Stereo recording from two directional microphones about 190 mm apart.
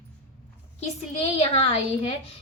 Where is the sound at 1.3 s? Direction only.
35° left (ahead or behind).